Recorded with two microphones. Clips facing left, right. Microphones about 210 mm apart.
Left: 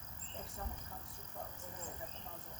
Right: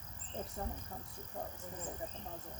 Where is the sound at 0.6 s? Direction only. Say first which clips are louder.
Right 5 dB; 35° right (ahead or behind).